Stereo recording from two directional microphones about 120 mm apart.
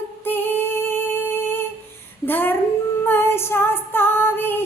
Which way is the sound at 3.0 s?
20° left (ahead or behind).